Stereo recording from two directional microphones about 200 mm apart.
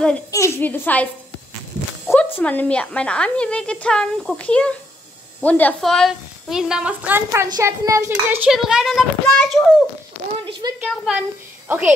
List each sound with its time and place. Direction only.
0.3 s a woman's voice: 10° left (ahead or behind)
2.0 s a woman's voice: 10° left (ahead or behind)
10.6 s a woman's voice: 20° right (ahead or behind)
11.1 s a woman's voice: 10° right (ahead or behind)